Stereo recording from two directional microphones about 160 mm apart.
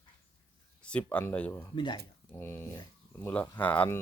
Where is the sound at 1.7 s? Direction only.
30° left (ahead or behind).